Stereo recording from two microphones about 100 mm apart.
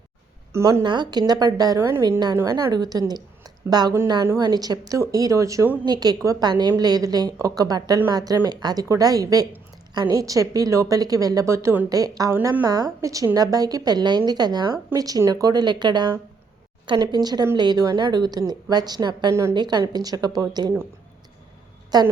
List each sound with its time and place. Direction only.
0.5 s a woman's voice: 30° right (ahead or behind)
0.9 s a woman's voice: 45° right (ahead or behind)
1.8 s a woman's voice: 30° right (ahead or behind)
2.0 s a woman's voice: 45° right (ahead or behind); by 11.9 s 25° right (ahead or behind)
11.9 s a woman's voice: 40° right (ahead or behind)
19.3 s a woman's voice: 30° right (ahead or behind)
19.5 s a woman's voice: 45° right (ahead or behind)
21.9 s a woman's voice: 40° right (ahead or behind)